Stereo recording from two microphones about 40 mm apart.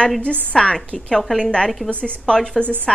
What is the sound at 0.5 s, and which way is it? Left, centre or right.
A woman's voice, centre.